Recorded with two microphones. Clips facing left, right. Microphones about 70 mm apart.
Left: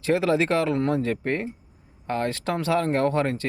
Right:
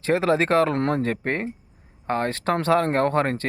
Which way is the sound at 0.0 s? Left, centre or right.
Right.